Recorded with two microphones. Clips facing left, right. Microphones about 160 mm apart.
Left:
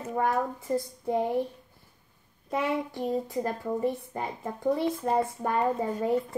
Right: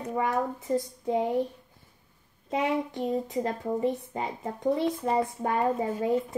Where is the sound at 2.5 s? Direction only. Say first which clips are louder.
Right 1 dB; 20° right (ahead or behind).